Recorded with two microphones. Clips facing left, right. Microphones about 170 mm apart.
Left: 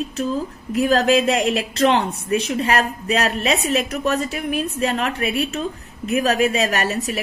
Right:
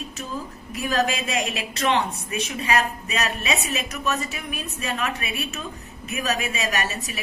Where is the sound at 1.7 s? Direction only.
30° left (ahead or behind).